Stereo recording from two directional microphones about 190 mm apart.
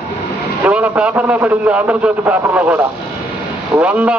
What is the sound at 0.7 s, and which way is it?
A man's voice, 5° right (ahead or behind).